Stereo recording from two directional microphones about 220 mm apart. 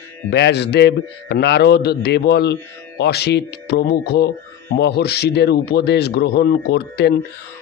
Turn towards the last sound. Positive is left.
turn(degrees=45)  # may be behind; listen again after turning